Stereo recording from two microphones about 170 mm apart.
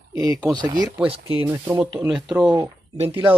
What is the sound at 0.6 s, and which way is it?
Speech, 25° right (ahead or behind).